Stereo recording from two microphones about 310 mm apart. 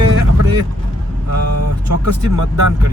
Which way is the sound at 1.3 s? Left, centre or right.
Right.